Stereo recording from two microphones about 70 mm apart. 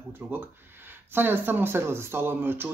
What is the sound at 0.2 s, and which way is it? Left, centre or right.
Speech, right.